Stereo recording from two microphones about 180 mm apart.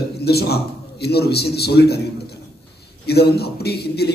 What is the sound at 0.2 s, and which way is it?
A man's voice, 60° left (ahead or behind).